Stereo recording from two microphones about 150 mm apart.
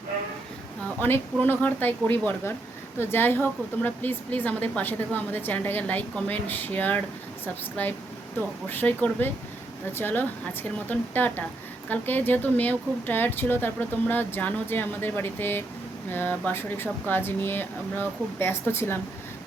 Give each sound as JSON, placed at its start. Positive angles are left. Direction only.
{"t": 0.9, "sound": "speech", "side_deg": 15}